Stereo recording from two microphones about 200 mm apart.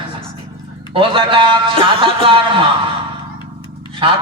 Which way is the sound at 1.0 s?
25° right (ahead or behind).